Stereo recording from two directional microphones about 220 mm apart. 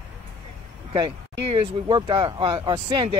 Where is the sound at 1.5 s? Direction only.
20° right (ahead or behind).